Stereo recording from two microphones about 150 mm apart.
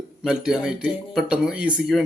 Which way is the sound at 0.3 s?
5° right (ahead or behind).